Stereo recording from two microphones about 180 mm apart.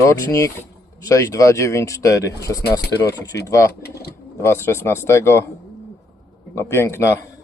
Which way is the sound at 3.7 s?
60° left (ahead or behind).